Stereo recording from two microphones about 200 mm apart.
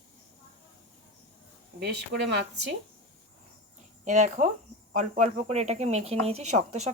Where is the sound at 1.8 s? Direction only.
60° right (ahead or behind).